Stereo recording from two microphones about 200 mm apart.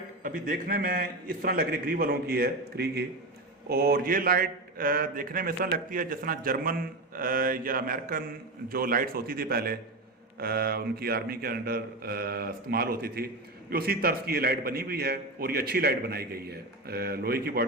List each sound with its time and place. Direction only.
0.2 s a man's voice: 45° right (ahead or behind)